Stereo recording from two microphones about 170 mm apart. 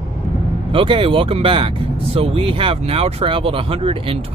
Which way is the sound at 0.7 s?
30° right (ahead or behind).